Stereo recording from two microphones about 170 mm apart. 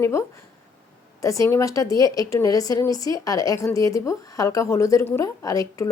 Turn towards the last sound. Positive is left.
turn(degrees=20)  # may be behind; listen again after turning